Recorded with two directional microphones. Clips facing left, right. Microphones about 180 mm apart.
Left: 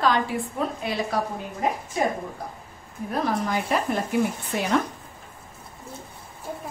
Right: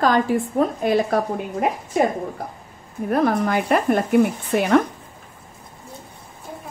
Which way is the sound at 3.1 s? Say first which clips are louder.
Right 6 dB; 55° right (ahead or behind).